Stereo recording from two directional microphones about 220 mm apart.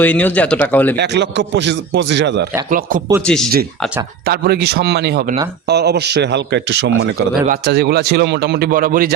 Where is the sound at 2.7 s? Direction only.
40° right (ahead or behind).